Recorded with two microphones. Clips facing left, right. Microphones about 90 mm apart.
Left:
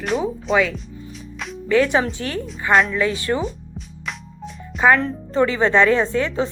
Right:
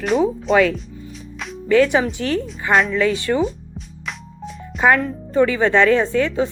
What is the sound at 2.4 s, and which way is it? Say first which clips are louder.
Speech: left 3 dB; centre (ahead or behind).